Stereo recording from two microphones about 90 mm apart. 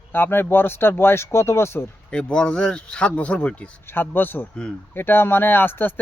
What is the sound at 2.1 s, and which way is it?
Speech, 10° left (ahead or behind).